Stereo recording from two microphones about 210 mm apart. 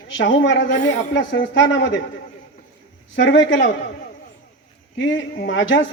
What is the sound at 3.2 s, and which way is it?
Speech, 60° left (ahead or behind).